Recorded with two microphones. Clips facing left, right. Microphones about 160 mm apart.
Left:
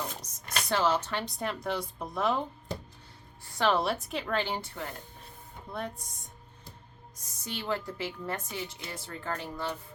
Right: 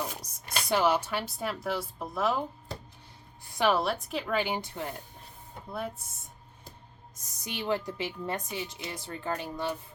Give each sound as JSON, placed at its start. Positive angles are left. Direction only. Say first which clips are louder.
{"t": 0.0, "sound": "speech", "louder": "right 2 dB", "side_deg": -10}
{"t": 3.4, "sound": "music", "louder": "right 1 dB", "side_deg": -15}
{"t": 3.8, "sound": "a woman's voice", "louder": "even", "side_deg": 0}
{"t": 5.7, "sound": "speech", "louder": "right 1 dB", "side_deg": -5}
{"t": 7.4, "sound": "a woman's voice", "louder": "right 3 dB", "side_deg": -15}